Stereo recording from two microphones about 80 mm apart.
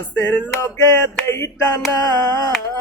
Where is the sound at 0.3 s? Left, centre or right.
Left.